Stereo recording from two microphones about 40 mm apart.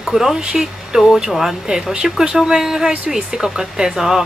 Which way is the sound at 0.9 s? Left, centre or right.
Centre.